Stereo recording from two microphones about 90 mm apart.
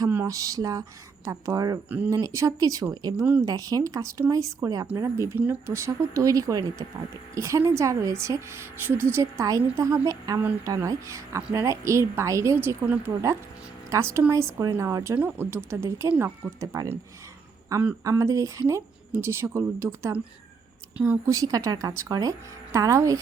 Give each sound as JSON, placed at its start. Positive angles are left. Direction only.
{"t": 0.1, "sound": "a woman's voice", "side_deg": -30}
{"t": 2.9, "sound": "a woman's voice", "side_deg": -50}
{"t": 12.5, "sound": "speech", "side_deg": -20}
{"t": 13.9, "sound": "a woman's voice", "side_deg": -30}
{"t": 15.1, "sound": "a woman's voice", "side_deg": -20}
{"t": 18.0, "sound": "a woman's voice", "side_deg": -35}
{"t": 18.7, "sound": "speech", "side_deg": -25}
{"t": 21.2, "sound": "a woman's voice", "side_deg": -40}